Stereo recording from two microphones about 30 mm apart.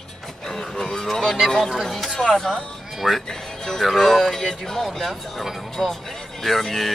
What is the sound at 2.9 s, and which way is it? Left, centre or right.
Music, centre.